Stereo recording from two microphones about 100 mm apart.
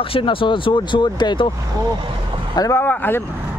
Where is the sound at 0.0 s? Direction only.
65° left (ahead or behind).